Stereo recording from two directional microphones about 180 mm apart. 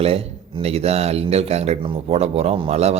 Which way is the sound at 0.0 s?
35° right (ahead or behind).